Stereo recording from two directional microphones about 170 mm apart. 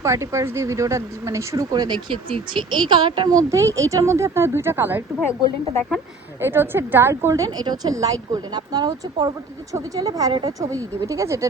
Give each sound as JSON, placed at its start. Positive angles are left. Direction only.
{"t": 0.0, "sound": "speech", "side_deg": -15}
{"t": 6.4, "sound": "a woman's voice", "side_deg": -15}